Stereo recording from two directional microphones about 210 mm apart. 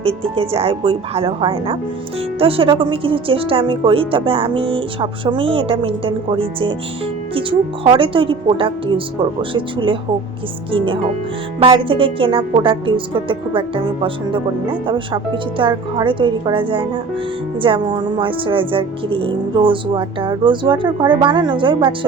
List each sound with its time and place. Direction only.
0.0 s a woman's voice: 25° right (ahead or behind)
7.9 s a woman's voice: 25° right (ahead or behind)